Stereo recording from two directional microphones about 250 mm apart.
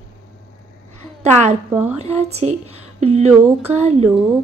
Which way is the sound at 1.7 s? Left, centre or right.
Centre.